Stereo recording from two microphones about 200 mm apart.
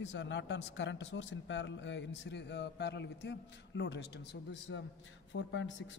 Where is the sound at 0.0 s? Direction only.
65° left (ahead or behind).